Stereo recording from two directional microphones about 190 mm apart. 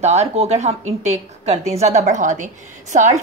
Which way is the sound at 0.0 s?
35° right (ahead or behind).